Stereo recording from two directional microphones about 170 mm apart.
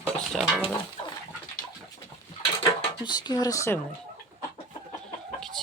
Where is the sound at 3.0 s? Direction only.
25° left (ahead or behind).